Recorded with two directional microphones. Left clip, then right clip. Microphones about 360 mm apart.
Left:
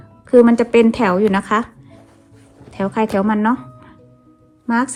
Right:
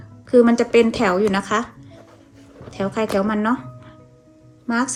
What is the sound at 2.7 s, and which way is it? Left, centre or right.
Speech, centre.